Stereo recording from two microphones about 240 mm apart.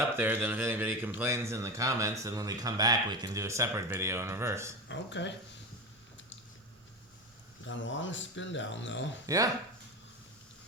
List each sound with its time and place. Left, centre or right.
0.2 s speech: centre
4.9 s speech: left
7.6 s speech: left
9.2 s speech: centre